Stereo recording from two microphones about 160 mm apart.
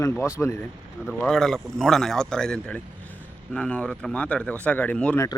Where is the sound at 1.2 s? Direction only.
5° left (ahead or behind).